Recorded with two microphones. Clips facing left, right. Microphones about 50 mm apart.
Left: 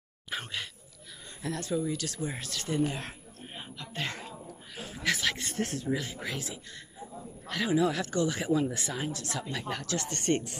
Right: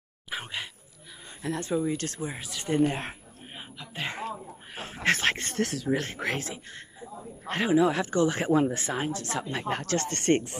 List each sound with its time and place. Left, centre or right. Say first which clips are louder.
0.3 s a sound: right 1 dB; centre
1.4 s speech: right 3 dB; right
2.2 s speech: right 1 dB; centre
2.7 s speech: right 5 dB; right
3.5 s a sound: even; centre
4.7 s speech: right 5 dB; right
5.6 s speech: right 4 dB; right
6.4 s speech: right 3 dB; right
7.7 s speech: right 4 dB; right
8.4 s speech: right 4 dB; right